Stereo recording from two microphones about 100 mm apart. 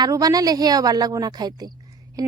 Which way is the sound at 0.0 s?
40° right (ahead or behind).